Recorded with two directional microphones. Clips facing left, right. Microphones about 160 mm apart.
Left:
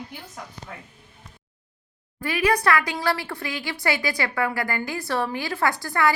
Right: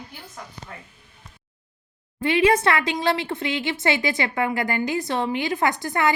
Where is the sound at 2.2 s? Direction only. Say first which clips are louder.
Right 3 dB; 25° right (ahead or behind).